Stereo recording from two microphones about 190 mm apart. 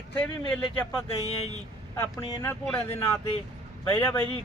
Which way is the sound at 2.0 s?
10° left (ahead or behind).